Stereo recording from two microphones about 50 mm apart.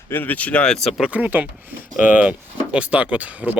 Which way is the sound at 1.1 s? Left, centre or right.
Right.